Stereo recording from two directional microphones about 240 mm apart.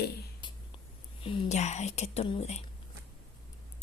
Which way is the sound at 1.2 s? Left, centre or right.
Left.